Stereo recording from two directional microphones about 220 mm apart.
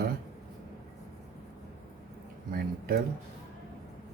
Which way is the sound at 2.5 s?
45° right (ahead or behind).